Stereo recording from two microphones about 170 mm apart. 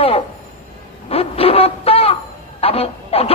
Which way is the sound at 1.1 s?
35° left (ahead or behind).